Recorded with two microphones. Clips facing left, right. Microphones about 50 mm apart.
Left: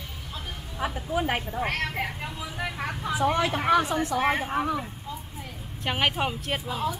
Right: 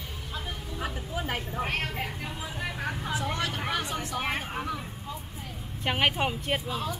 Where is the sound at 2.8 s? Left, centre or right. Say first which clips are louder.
Left 6 dB; left.